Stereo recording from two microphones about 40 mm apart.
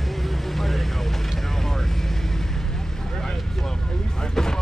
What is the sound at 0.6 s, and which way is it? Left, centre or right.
Vehicle, centre.